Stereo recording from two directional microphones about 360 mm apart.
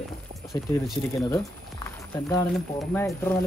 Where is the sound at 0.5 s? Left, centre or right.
Centre.